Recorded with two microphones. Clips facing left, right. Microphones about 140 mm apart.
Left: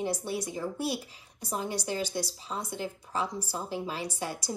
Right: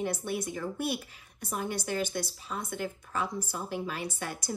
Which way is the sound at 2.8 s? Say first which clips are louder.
Even; 20° left (ahead or behind).